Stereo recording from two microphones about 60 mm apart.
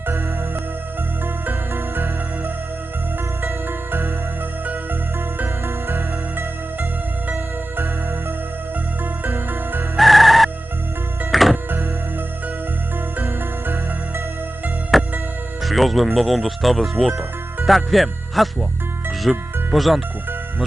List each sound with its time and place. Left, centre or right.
1.5 s music: right
5.6 s music: right
9.2 s music: right
10.0 s music: centre
14.9 s music: centre
15.6 s speech: centre
17.1 s music: right
17.7 s speech: centre